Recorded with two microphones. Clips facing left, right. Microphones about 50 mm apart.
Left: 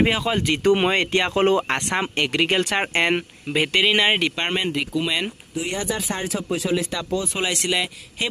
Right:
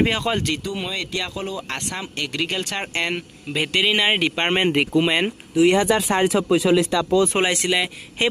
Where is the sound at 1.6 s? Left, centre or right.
Left.